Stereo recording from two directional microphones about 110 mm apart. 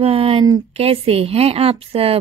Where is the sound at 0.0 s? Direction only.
60° right (ahead or behind).